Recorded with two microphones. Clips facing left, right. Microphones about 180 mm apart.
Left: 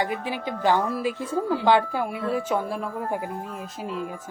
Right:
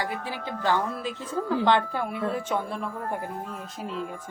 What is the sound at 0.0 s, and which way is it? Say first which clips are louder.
Speech: left 4 dB; 15° left (ahead or behind).